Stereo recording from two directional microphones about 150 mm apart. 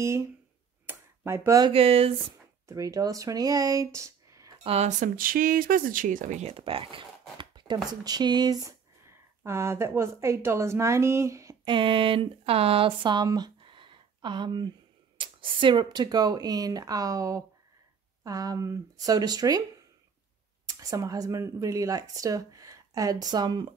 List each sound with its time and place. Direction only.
0.0 s speech: 20° right (ahead or behind)
0.8 s a sound: 15° right (ahead or behind)
1.7 s speech: 40° right (ahead or behind)
2.7 s speech: 25° right (ahead or behind)
4.6 s speech: 50° right (ahead or behind); by 11.5 s 20° right (ahead or behind)
11.6 s speech: 35° right (ahead or behind)
20.6 s speech: 25° right (ahead or behind)